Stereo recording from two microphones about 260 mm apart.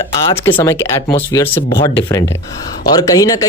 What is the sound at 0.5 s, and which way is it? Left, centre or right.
Speech, centre.